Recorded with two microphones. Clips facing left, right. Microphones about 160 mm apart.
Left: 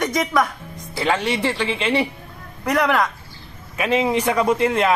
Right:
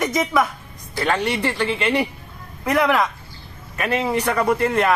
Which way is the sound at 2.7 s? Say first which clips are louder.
Right 1 dB; centre (ahead or behind).